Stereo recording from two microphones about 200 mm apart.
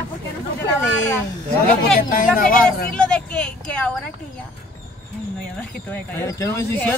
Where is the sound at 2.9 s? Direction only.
5° left (ahead or behind).